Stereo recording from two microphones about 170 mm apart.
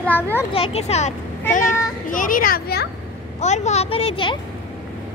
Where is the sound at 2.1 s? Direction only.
50° left (ahead or behind).